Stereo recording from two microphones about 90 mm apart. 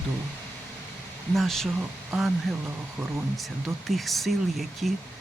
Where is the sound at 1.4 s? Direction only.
5° left (ahead or behind).